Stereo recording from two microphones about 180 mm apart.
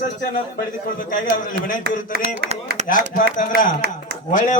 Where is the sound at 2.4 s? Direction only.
60° right (ahead or behind).